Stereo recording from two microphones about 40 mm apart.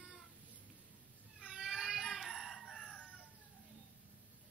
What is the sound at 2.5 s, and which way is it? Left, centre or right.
Crowing, centre.